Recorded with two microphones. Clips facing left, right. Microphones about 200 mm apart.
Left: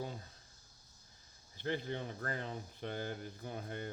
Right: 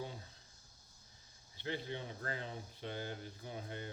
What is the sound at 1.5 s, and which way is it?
Speech, 50° left (ahead or behind).